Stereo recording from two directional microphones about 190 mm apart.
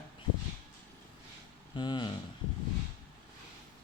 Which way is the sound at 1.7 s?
25° left (ahead or behind).